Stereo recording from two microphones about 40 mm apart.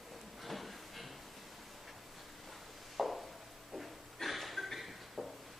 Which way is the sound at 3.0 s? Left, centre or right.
Centre.